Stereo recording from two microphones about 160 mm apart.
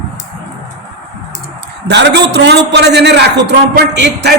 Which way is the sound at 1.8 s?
90° right.